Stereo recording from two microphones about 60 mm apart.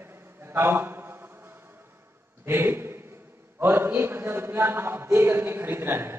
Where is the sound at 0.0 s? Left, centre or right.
Right.